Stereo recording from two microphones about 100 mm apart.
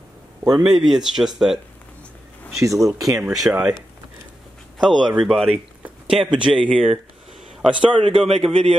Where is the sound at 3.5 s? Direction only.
10° right (ahead or behind).